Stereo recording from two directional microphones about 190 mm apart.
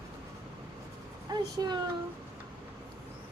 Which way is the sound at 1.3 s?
20° right (ahead or behind).